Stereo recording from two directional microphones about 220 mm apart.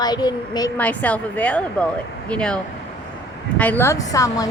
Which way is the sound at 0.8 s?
5° left (ahead or behind).